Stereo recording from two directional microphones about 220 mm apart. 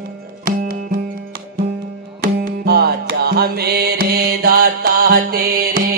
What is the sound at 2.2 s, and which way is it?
Music, 40° right (ahead or behind).